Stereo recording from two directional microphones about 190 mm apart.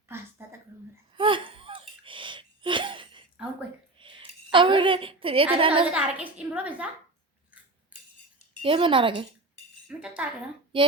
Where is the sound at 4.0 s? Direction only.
25° right (ahead or behind).